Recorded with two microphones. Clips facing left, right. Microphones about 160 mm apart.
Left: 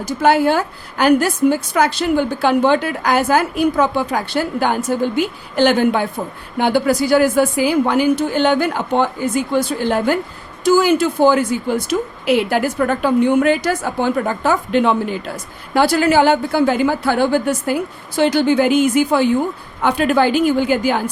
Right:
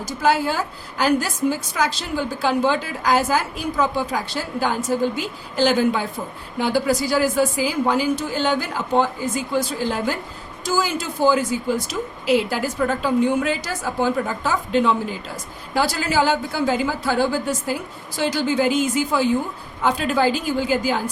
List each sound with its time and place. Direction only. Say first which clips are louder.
0.0 s a woman's voice: left 6 dB; 60° left (ahead or behind)